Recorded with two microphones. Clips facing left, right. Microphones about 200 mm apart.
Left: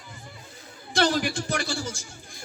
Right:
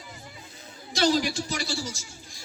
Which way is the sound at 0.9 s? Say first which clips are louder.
Even; 55° left (ahead or behind).